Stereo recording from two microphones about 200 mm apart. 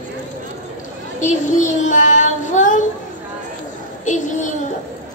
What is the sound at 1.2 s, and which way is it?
Child singing, 40° left (ahead or behind).